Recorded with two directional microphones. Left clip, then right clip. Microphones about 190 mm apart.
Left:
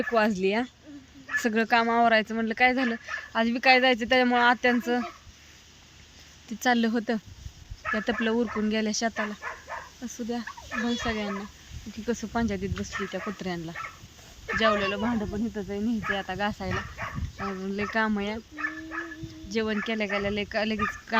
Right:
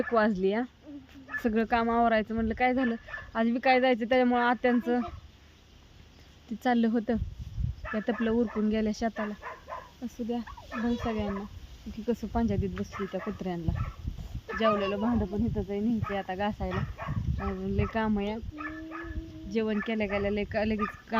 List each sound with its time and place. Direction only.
0.1 s speech: centre (ahead or behind)
6.6 s speech: centre (ahead or behind)
8.2 s speech: centre (ahead or behind)
10.0 s speech: 5° left (ahead or behind)